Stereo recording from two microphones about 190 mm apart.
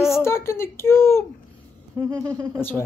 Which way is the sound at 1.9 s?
15° right (ahead or behind).